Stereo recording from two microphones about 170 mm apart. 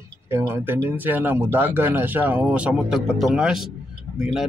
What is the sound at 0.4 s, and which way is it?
Speech, 15° right (ahead or behind).